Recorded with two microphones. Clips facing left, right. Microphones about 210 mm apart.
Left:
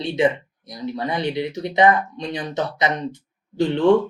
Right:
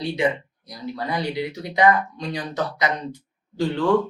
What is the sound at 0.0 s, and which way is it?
Speech, 20° left (ahead or behind).